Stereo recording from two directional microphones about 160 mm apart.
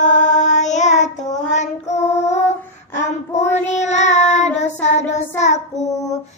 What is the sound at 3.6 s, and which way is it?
Child singing, 45° left (ahead or behind).